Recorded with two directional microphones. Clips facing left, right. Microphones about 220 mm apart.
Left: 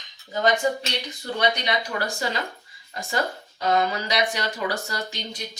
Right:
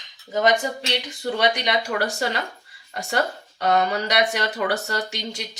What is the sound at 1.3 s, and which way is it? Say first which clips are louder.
Speech: right 2 dB; 80° right.